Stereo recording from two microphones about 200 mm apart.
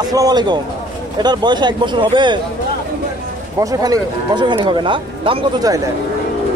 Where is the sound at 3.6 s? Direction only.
20° right (ahead or behind).